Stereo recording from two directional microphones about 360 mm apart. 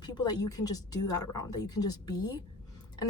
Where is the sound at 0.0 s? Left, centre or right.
Centre.